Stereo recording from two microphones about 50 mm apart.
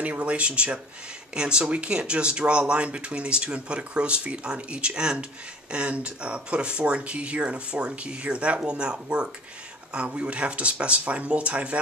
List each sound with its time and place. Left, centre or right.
0.0 s speech: right